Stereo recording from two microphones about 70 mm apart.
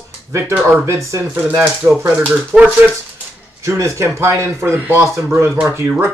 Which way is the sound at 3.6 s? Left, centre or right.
Right.